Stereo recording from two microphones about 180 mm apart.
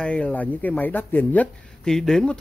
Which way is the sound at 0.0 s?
5° left (ahead or behind).